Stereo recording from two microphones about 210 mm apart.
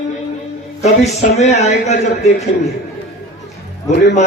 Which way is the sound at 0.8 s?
30° left (ahead or behind).